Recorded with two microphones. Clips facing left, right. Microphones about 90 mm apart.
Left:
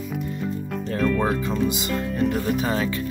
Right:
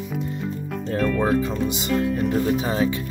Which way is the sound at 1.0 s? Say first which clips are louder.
Even; centre (ahead or behind).